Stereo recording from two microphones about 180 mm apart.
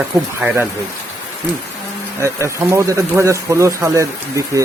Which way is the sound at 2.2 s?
15° right (ahead or behind).